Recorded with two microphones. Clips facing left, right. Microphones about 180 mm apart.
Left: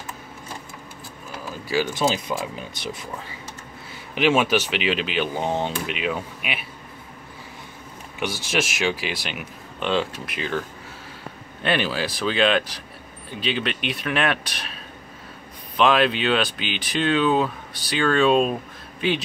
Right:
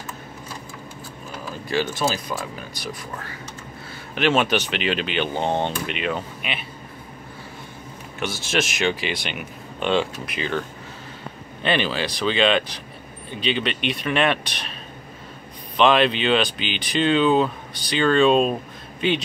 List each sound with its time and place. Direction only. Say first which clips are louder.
2.0 s speech: left 2 dB; 20° left (ahead or behind)
4.1 s speech: left 1 dB; 10° left (ahead or behind)
8.2 s speech: right 1 dB; 10° left (ahead or behind)
11.6 s speech: right 1 dB; 5° left (ahead or behind)